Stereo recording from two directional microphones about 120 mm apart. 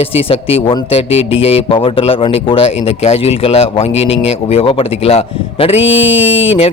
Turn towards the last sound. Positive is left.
turn(degrees=50)  # may be behind; listen again after turning